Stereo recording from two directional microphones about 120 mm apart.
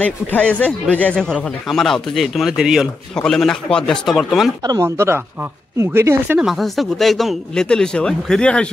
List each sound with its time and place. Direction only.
0.0 s speech: 10° left (ahead or behind)
4.6 s speech: 25° right (ahead or behind)
6.4 s speech: centre (ahead or behind)